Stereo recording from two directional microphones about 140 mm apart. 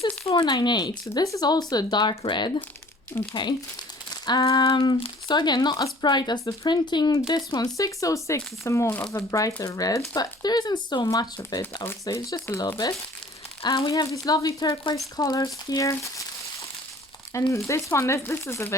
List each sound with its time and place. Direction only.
0.0 s speech: 40° left (ahead or behind)
3.1 s speech: 20° left (ahead or behind)
4.1 s speech: 30° left (ahead or behind)